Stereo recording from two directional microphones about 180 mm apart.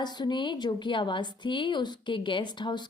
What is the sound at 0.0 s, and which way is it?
A woman's voice, 25° left (ahead or behind).